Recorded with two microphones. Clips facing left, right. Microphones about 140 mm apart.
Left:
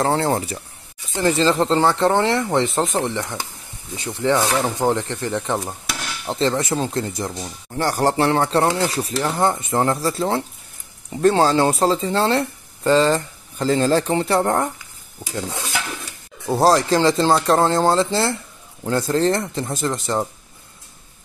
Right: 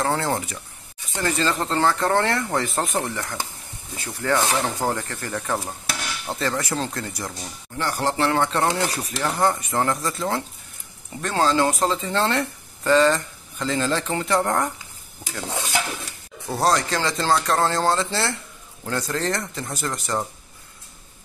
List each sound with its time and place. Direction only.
0.0 s speech: 25° left (ahead or behind)
7.7 s speech: 40° left (ahead or behind)
16.4 s speech: 30° left (ahead or behind)